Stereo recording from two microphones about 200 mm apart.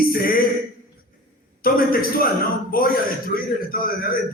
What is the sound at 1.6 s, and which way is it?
A man's voice, 45° left (ahead or behind).